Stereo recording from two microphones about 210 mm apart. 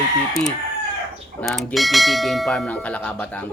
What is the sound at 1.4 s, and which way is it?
Bell, 5° left (ahead or behind).